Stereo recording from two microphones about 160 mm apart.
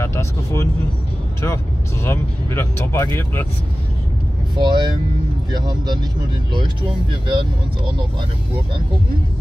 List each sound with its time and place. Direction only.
0.0 s speech: 15° left (ahead or behind)
4.6 s speech: 30° right (ahead or behind)